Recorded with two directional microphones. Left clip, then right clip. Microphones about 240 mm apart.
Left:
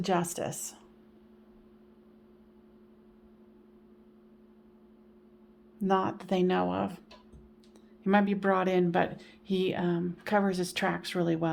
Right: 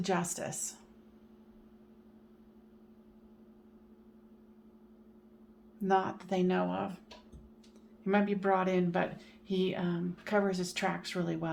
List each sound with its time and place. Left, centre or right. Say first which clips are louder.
0.0 s speech: left 4 dB; left
5.8 s speech: left 2 dB; left
8.0 s speech: left 3 dB; left